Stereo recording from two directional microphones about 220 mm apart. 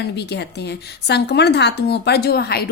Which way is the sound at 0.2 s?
50° left (ahead or behind).